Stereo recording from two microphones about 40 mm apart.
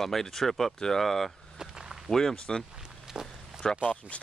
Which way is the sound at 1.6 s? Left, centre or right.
Centre.